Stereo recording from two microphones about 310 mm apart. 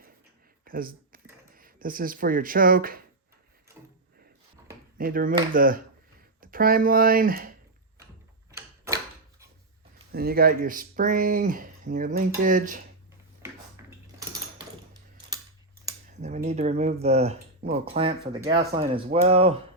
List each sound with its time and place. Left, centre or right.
0.6 s speech: right
4.9 s speech: right
8.5 s tick-tock: centre
10.1 s speech: right
13.8 s dishes: centre
16.1 s speech: right
17.9 s speech: centre